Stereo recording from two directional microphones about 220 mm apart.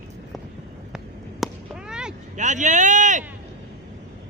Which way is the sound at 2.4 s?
35° right (ahead or behind).